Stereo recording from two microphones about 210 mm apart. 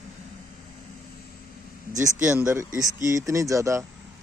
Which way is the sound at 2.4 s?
10° right (ahead or behind).